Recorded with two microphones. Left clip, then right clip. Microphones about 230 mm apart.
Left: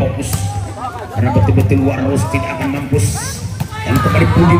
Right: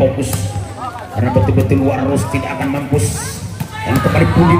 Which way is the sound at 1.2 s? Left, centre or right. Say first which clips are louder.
Right 1 dB; centre.